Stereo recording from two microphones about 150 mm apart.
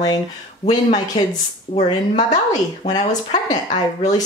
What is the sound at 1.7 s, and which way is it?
Speech, 50° left (ahead or behind).